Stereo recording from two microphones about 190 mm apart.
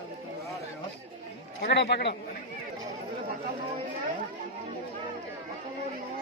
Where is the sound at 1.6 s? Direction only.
55° left (ahead or behind).